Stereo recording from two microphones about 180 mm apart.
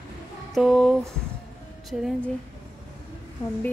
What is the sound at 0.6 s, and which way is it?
Speech, centre (ahead or behind).